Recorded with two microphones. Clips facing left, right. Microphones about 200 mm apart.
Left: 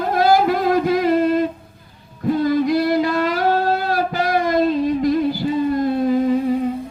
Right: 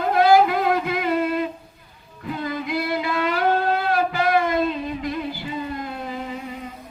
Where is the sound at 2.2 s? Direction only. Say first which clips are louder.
Left 11 dB; 40° left (ahead or behind).